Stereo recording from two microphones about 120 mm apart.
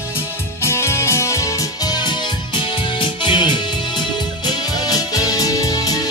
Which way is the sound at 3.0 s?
40° left (ahead or behind).